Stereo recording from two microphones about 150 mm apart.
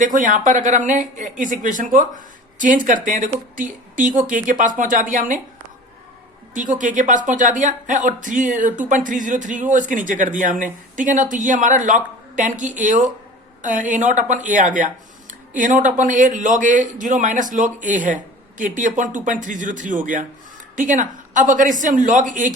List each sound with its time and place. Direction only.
0.0 s speech: 60° right (ahead or behind)
6.5 s speech: 60° right (ahead or behind)